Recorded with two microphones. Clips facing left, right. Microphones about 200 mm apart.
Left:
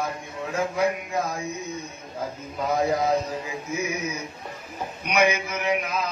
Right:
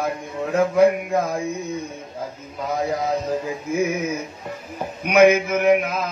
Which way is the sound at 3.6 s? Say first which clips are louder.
Right 8 dB; 55° right (ahead or behind).